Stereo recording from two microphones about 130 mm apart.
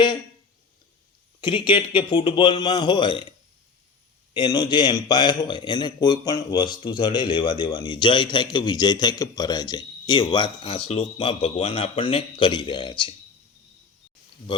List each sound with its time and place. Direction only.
1.4 s a man's voice: 40° left (ahead or behind)
4.4 s a man's voice: 35° left (ahead or behind)